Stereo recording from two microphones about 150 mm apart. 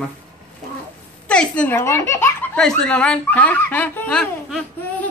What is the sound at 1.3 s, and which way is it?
Speech, 10° left (ahead or behind).